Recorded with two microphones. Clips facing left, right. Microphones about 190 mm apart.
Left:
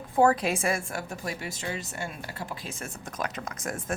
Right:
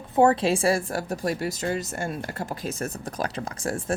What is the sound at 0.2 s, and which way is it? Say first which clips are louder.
A woman's voice: right 3 dB; 25° right (ahead or behind).